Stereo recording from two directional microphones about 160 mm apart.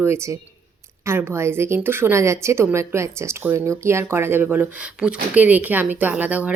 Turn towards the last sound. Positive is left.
turn(degrees=-10)  # may be behind; listen again after turning